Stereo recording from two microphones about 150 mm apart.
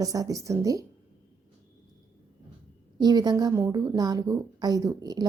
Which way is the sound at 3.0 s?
25° right (ahead or behind).